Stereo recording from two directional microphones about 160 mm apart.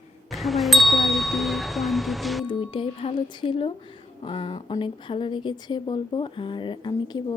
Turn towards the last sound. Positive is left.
turn(degrees=25)  # may be behind; listen again after turning